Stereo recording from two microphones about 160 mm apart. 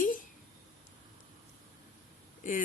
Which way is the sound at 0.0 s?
55° left (ahead or behind).